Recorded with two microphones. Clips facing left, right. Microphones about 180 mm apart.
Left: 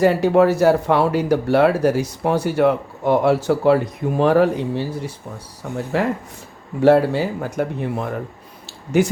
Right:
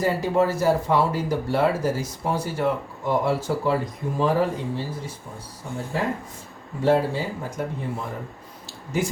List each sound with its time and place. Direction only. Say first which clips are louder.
0.0 s speech: left 7 dB; 70° left (ahead or behind)